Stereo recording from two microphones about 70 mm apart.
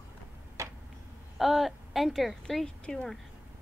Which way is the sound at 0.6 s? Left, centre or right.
Right.